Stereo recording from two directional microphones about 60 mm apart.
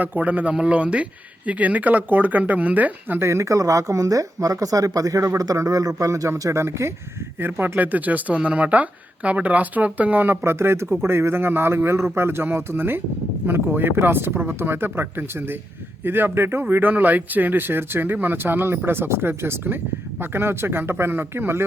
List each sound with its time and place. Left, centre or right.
0.0 s speech: right
3.2 s a man's voice: right
6.0 s speech: right
7.4 s speech: right
10.4 s a man's voice: right
16.0 s speech: right